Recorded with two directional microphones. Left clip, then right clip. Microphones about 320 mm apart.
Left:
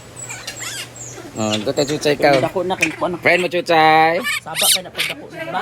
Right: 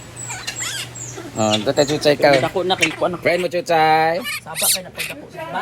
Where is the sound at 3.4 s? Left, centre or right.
Centre.